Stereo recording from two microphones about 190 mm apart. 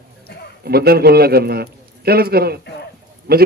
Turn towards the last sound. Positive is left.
turn(degrees=-55)  # may be behind; listen again after turning